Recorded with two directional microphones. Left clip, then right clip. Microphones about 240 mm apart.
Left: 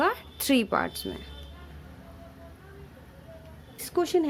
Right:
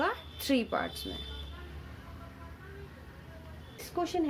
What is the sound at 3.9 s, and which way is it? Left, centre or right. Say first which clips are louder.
Speech: left 7 dB; left.